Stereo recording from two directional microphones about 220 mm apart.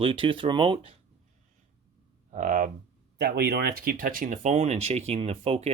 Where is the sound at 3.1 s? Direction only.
45° right (ahead or behind).